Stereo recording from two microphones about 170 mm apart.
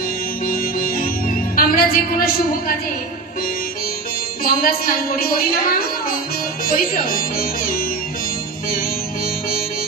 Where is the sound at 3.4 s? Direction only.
60° left (ahead or behind).